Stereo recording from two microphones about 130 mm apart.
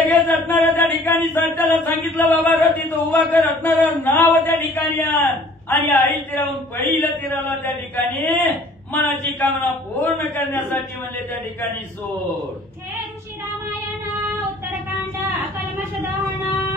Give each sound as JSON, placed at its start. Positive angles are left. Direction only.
{"t": 0.0, "sound": "chant", "side_deg": 15}
{"t": 5.7, "sound": "a man's voice", "side_deg": 15}